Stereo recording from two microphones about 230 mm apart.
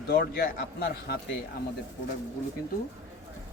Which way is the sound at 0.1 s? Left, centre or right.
Left.